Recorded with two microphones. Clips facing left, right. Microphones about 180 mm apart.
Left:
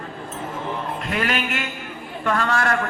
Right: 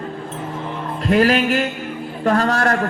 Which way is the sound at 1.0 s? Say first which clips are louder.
Right 11 dB; 35° right (ahead or behind).